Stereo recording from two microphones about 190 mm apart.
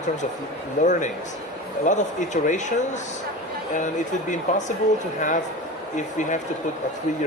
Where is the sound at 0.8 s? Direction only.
40° left (ahead or behind).